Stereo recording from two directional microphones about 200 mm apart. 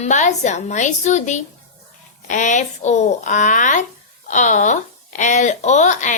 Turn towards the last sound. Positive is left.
turn(degrees=35)  # may be behind; listen again after turning